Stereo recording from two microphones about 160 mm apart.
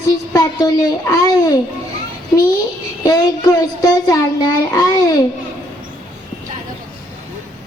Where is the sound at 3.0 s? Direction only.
20° left (ahead or behind).